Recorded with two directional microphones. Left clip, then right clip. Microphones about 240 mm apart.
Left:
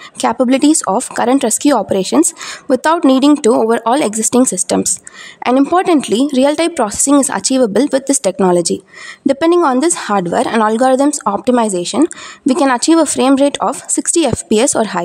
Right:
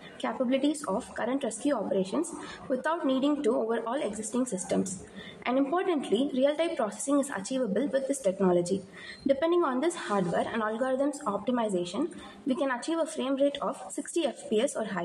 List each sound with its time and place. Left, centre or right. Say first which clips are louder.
0.2 s a woman's voice: left 16 dB; left